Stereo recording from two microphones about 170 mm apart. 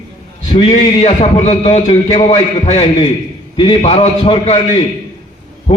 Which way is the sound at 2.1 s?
40° left (ahead or behind).